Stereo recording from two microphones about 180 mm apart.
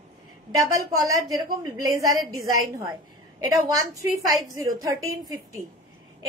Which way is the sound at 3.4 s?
20° right (ahead or behind).